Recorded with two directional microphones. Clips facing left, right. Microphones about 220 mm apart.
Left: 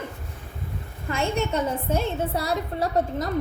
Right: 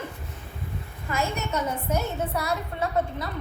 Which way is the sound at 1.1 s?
30° left (ahead or behind).